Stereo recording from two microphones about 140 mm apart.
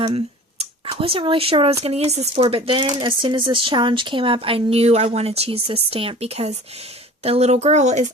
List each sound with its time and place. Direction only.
0.9 s speech: 40° right (ahead or behind)